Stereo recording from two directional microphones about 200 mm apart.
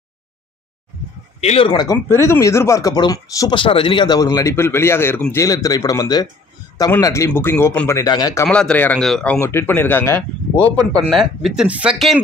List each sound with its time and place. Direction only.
1.4 s speech: 30° left (ahead or behind)
1.7 s speech: 20° left (ahead or behind)
8.5 s speech: 5° left (ahead or behind)
11.1 s speech: centre (ahead or behind)